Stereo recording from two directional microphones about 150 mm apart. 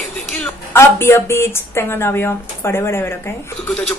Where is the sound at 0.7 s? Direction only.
15° left (ahead or behind).